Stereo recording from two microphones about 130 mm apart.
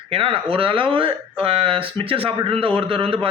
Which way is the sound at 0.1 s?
45° right (ahead or behind).